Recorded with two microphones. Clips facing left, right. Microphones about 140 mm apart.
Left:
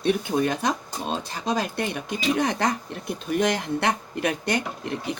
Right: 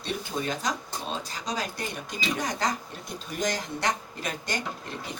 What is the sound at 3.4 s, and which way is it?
Speech, 60° left (ahead or behind).